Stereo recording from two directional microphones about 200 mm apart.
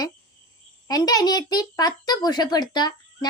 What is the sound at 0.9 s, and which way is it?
A child's voice, 20° left (ahead or behind).